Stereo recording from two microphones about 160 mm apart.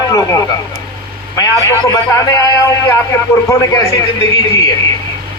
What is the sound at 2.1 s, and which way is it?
A man's voice, 20° left (ahead or behind).